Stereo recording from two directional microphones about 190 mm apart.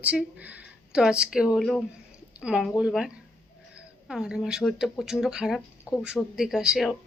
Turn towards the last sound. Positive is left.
turn(degrees=0)  # may be behind; listen again after turning